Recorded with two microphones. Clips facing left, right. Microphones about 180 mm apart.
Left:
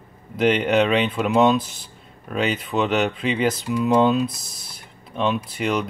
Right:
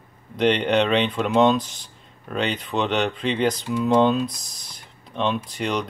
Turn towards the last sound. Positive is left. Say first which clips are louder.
# left 2 dB
turn(degrees=5)  # may be behind; listen again after turning